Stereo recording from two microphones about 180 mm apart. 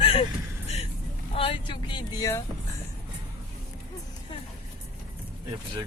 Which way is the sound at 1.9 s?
20° left (ahead or behind).